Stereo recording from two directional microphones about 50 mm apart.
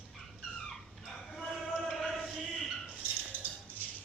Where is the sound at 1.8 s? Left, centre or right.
Centre.